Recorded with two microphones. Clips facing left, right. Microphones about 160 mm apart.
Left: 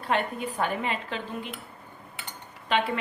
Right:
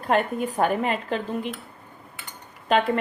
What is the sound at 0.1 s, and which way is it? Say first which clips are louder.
A woman's voice: right 5 dB; 45° right (ahead or behind).